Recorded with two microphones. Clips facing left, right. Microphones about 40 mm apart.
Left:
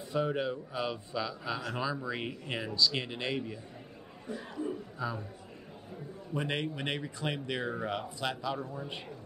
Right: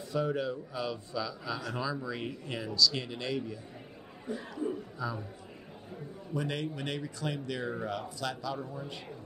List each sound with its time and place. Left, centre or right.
0.1 s speech: left
4.3 s speech: centre
5.0 s speech: left
6.3 s speech: left
8.5 s a man's voice: centre